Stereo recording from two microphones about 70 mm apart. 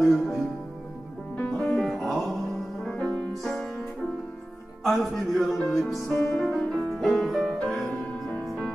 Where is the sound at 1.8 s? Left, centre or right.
Centre.